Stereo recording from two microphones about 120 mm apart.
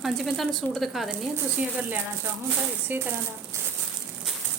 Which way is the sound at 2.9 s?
15° right (ahead or behind).